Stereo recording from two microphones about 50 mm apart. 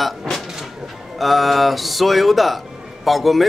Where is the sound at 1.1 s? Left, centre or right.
Centre.